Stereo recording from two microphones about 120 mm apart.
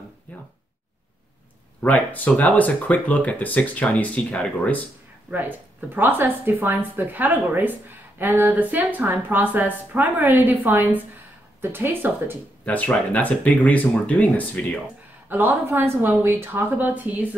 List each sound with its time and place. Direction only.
0.3 s a sound: 10° left (ahead or behind)
1.8 s speech: 15° left (ahead or behind)
5.3 s a woman's voice: 15° right (ahead or behind)
12.6 s speech: 10° left (ahead or behind)
15.2 s a woman's voice: 15° right (ahead or behind)